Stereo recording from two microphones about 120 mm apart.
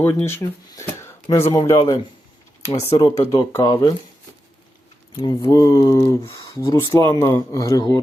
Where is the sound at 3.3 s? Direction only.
25° left (ahead or behind).